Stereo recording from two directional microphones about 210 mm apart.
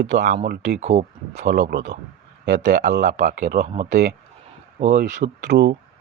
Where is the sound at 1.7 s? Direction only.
55° right (ahead or behind).